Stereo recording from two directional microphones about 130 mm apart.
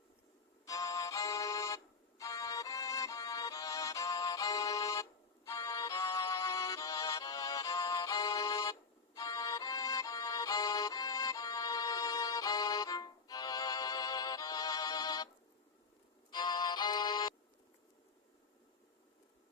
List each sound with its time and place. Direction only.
0.6 s music: 25° left (ahead or behind)
16.3 s music: 35° left (ahead or behind)